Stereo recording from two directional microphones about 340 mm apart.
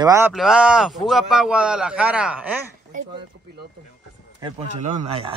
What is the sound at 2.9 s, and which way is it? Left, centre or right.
Speech, right.